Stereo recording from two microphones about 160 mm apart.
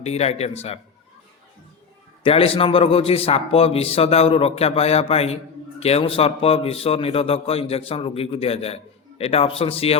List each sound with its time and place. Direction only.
0.0 s a man's voice: 40° left (ahead or behind)
2.2 s a man's voice: 35° left (ahead or behind)